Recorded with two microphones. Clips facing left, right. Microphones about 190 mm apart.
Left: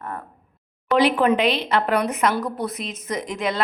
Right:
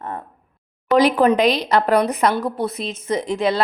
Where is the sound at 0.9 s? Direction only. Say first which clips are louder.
Right 3 dB; 40° right (ahead or behind).